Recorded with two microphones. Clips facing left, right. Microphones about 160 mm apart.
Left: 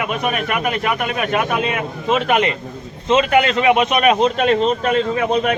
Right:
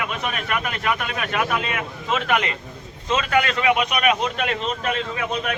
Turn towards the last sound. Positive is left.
turn(degrees=40)  # may be behind; listen again after turning